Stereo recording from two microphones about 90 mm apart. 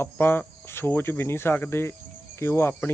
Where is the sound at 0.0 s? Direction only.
25° left (ahead or behind).